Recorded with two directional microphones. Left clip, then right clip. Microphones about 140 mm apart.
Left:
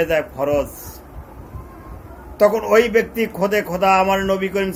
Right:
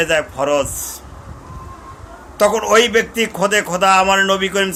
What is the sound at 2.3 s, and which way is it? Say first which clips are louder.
A man's voice: right 1 dB; 15° right (ahead or behind).